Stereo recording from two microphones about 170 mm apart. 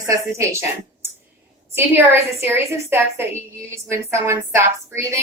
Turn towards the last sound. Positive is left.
turn(degrees=-15)  # may be behind; listen again after turning